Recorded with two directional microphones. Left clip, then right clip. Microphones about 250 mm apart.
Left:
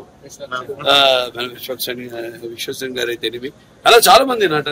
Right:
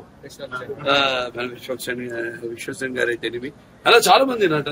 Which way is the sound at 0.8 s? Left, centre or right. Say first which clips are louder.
Left 6 dB; centre.